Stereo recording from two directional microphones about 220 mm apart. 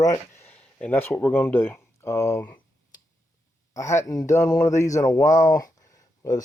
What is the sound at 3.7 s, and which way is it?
Speech, 15° left (ahead or behind).